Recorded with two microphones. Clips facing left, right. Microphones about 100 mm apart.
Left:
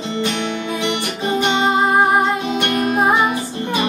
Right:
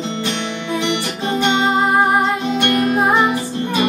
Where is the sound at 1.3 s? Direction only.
15° left (ahead or behind).